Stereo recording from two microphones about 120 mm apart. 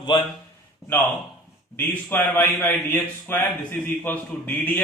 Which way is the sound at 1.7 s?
15° left (ahead or behind).